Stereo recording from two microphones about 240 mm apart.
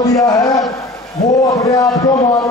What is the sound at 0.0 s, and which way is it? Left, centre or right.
Speech, centre.